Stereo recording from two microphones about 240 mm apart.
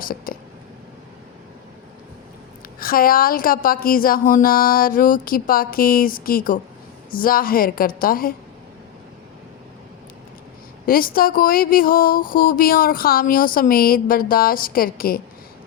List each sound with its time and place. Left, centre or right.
0.0 s speech: left
2.7 s speech: left
10.8 s speech: left